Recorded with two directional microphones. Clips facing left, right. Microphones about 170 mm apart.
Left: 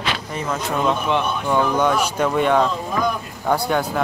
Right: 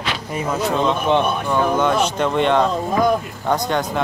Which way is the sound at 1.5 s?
10° left (ahead or behind).